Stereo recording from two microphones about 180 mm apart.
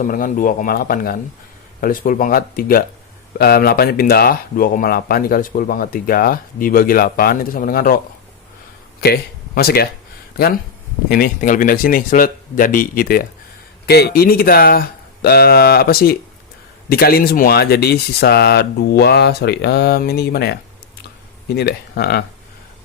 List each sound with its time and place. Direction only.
0.0 s speech: 50° left (ahead or behind)
9.0 s speech: 60° left (ahead or behind)
11.1 s speech: 50° left (ahead or behind)
13.8 s speech: 65° left (ahead or behind)